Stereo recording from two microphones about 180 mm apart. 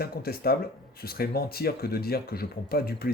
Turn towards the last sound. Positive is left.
turn(degrees=55)  # may be behind; listen again after turning